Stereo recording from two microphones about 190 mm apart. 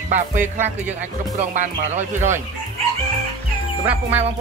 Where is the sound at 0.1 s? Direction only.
40° right (ahead or behind).